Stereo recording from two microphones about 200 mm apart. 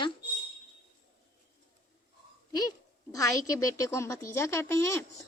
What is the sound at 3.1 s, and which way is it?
Speech, 15° left (ahead or behind).